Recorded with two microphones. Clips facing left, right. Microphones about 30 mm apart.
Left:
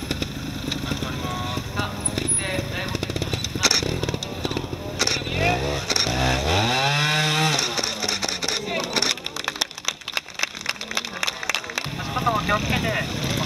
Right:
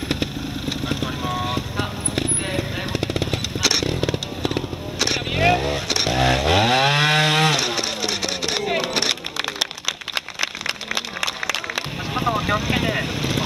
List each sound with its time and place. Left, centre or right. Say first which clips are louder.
0.8 s vehicle: right 3 dB; centre
3.8 s music: right 3 dB; centre
4.9 s vehicle: right 2 dB; centre
5.3 s vehicle: right 4 dB; centre
6.0 s chainsaw: right 7 dB; centre
7.5 s vehicle: right 2 dB; centre
8.6 s a sound: right 3 dB; centre
11.0 s a sound: right 2 dB; centre
12.3 s vehicle: even; centre